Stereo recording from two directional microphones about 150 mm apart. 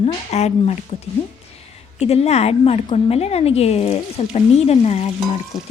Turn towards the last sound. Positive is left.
turn(degrees=-5)  # may be behind; listen again after turning